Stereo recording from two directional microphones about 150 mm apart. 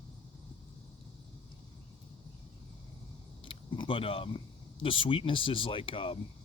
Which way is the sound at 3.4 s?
35° left (ahead or behind).